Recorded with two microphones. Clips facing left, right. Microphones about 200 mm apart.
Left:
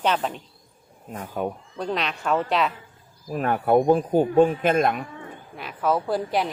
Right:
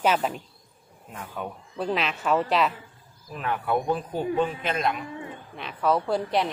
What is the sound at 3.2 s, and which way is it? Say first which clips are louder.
Speech: left 6 dB; 50° left (ahead or behind).